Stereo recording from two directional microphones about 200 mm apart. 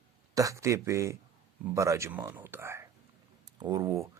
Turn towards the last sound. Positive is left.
turn(degrees=-15)  # may be behind; listen again after turning